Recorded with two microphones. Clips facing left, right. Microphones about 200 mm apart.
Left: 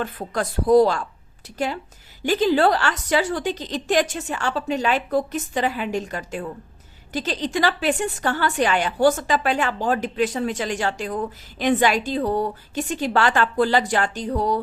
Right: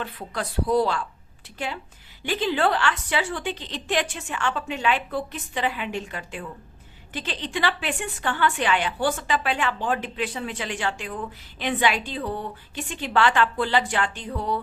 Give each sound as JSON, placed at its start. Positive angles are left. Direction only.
{"t": 0.0, "sound": "a woman's voice", "side_deg": 45}